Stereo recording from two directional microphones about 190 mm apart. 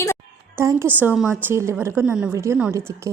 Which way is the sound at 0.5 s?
15° right (ahead or behind).